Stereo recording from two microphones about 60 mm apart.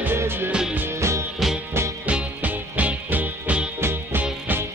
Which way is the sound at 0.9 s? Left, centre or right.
Right.